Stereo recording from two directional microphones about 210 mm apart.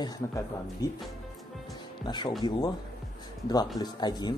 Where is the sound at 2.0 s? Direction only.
20° left (ahead or behind).